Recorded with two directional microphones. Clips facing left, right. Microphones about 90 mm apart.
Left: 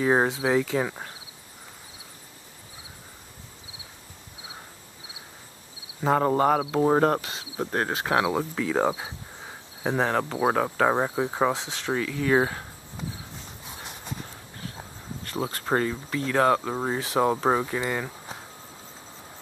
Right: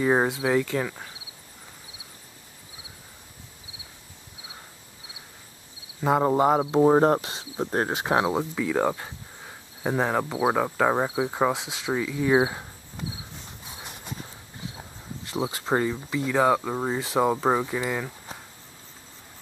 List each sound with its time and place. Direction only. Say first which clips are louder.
0.0 s speech: even; centre (ahead or behind)
6.0 s speech: right 1 dB; 10° right (ahead or behind)
8.3 s speech: even; 5° right (ahead or behind)
15.3 s speech: right 1 dB; 10° right (ahead or behind)